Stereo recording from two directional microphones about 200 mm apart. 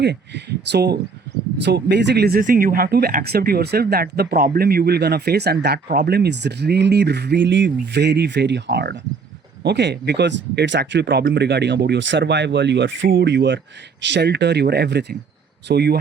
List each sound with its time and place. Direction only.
0.0 s speech: 55° right (ahead or behind)